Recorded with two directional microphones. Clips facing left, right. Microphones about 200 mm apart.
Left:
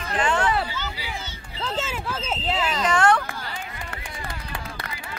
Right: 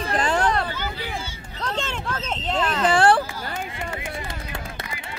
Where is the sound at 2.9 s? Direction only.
30° right (ahead or behind).